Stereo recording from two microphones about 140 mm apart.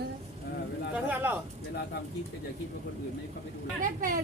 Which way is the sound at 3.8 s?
75° right (ahead or behind).